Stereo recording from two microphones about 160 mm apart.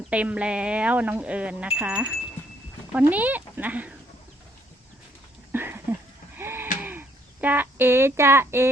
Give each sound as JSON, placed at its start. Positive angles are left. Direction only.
{"t": 0.1, "sound": "speech", "side_deg": -10}
{"t": 5.5, "sound": "a sound", "side_deg": -15}
{"t": 6.3, "sound": "sheep", "side_deg": -15}
{"t": 7.4, "sound": "speech", "side_deg": -10}